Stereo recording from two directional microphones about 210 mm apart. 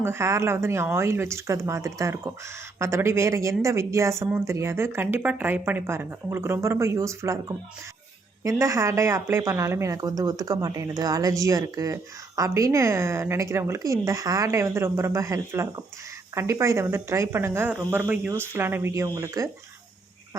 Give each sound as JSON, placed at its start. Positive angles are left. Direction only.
{"t": 0.0, "sound": "speech", "side_deg": -10}